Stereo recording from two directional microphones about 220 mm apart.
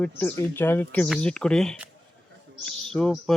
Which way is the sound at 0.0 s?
10° left (ahead or behind).